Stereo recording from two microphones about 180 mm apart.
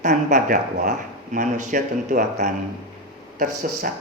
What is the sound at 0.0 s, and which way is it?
Speech, 40° right (ahead or behind).